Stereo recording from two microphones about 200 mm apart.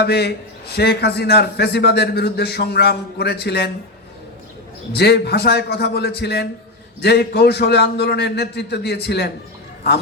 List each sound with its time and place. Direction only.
0.0 s a man's voice: 55° left (ahead or behind)
4.9 s a man's voice: 55° left (ahead or behind)